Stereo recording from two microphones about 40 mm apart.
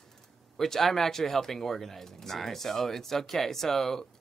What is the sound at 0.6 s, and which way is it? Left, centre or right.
Speech, centre.